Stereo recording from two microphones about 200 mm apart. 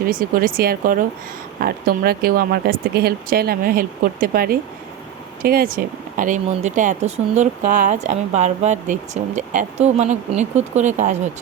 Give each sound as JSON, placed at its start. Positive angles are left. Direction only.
{"t": 0.0, "sound": "speech", "side_deg": -45}